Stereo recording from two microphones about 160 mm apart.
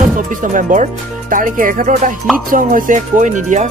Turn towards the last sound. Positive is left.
turn(degrees=-50)  # may be behind; listen again after turning